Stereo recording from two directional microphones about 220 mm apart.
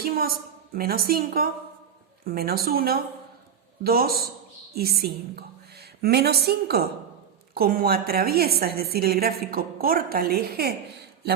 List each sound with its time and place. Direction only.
0.0 s a woman's voice: 45° right (ahead or behind)